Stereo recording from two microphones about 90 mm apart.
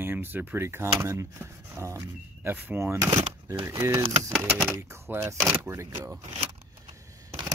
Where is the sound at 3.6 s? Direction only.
30° right (ahead or behind).